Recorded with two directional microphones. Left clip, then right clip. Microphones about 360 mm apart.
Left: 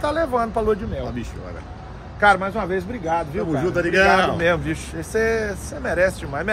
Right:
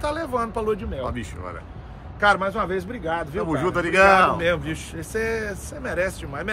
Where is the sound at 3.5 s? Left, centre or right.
Centre.